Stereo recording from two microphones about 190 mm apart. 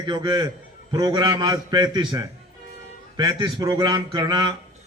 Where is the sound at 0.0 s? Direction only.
25° right (ahead or behind).